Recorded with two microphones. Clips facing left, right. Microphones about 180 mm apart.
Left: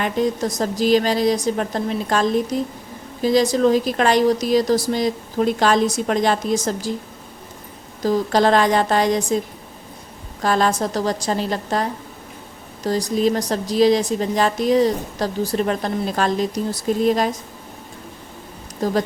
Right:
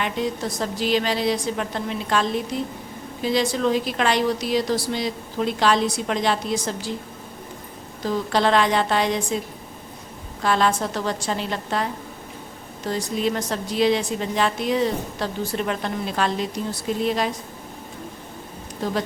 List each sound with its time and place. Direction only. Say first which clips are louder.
0.0 s a woman's voice: left 5 dB; 45° left (ahead or behind)
8.0 s a woman's voice: left 4 dB; 40° left (ahead or behind)
10.4 s a woman's voice: left 2 dB; 40° left (ahead or behind)
18.8 s a woman's voice: left 5 dB; 40° left (ahead or behind)